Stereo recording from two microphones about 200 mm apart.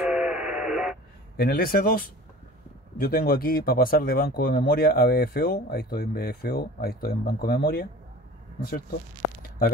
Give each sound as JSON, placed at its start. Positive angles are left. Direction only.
{"t": 0.0, "sound": "radio", "side_deg": -5}
{"t": 1.3, "sound": "speech", "side_deg": 50}